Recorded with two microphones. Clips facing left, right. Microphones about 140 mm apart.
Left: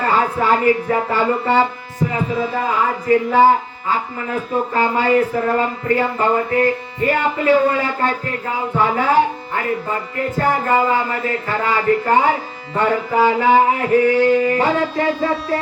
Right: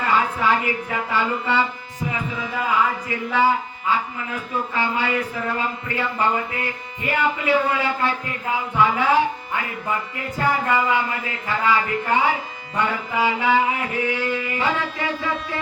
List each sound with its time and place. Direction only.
0.0 s speech: 40° left (ahead or behind)
2.1 s heart sounds: 35° left (ahead or behind)
3.1 s speech: 45° left (ahead or behind)
8.7 s heart sounds: 40° left (ahead or behind)
10.4 s speech: 40° left (ahead or behind)